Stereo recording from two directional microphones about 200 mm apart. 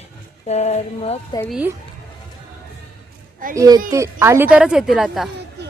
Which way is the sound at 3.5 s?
20° right (ahead or behind).